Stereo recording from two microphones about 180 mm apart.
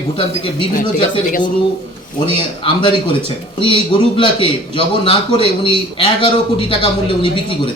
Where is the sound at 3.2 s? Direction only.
30° left (ahead or behind).